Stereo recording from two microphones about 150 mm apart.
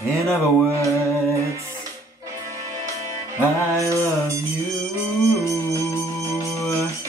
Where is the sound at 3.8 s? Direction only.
20° right (ahead or behind).